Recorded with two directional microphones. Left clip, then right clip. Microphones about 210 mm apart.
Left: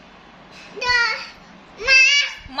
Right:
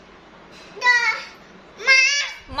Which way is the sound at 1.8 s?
15° right (ahead or behind).